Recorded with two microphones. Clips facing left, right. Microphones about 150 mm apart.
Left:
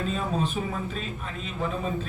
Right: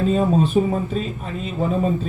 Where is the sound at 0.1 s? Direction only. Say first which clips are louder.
Right 10 dB; 40° right (ahead or behind).